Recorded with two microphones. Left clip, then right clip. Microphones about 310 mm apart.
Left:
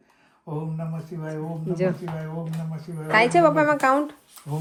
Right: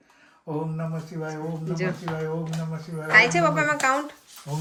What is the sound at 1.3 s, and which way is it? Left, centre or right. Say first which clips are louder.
Speech: left 3 dB; centre.